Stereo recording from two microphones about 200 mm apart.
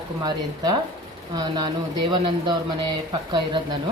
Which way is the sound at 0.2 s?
20° right (ahead or behind).